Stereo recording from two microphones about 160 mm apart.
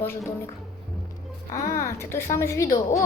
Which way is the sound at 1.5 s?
20° left (ahead or behind).